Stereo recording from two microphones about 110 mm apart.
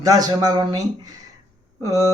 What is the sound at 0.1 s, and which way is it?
Speech, 35° right (ahead or behind).